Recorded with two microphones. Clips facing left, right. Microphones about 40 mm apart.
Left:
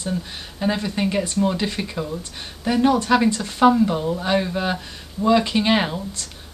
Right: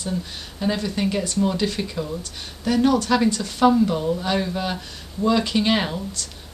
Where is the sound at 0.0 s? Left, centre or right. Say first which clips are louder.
Left 1 dB; centre.